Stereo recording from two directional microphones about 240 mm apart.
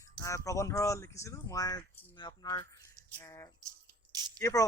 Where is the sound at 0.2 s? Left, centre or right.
Centre.